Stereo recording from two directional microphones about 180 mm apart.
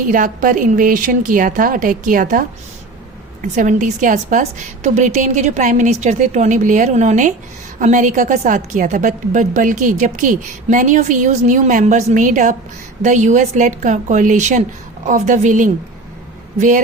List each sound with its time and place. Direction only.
0.1 s a woman's voice: 50° right (ahead or behind)
3.5 s a woman's voice: 45° right (ahead or behind)